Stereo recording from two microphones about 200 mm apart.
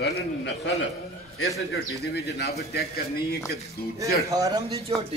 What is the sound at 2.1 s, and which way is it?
Speech, 55° left (ahead or behind).